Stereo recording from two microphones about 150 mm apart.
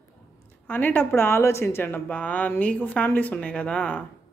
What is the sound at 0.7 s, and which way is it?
A woman's voice, 10° left (ahead or behind).